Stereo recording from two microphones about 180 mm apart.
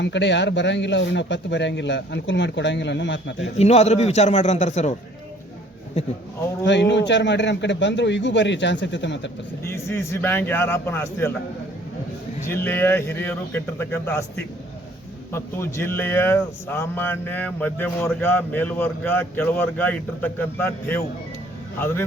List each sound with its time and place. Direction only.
0.0 s speech: 80° left
3.6 s a man's voice: 40° left (ahead or behind)
6.7 s speech: 75° left (ahead or behind)
9.6 s speech: 15° left (ahead or behind)
12.5 s speech: 10° left (ahead or behind)
15.3 s speech: 15° left (ahead or behind)